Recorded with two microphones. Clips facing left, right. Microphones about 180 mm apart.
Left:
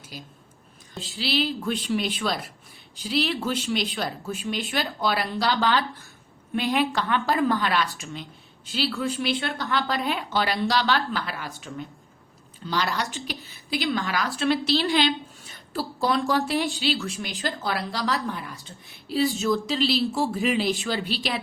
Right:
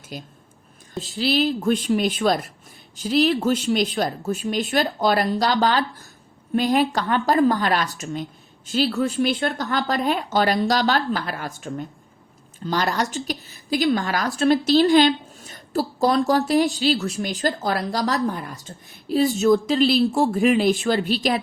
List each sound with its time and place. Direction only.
0.9 s a woman's voice: 45° right (ahead or behind)